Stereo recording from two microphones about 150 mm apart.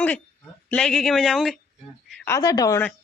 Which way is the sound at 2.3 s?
25° left (ahead or behind).